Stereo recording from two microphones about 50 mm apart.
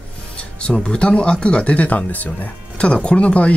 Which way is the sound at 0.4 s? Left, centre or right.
Left.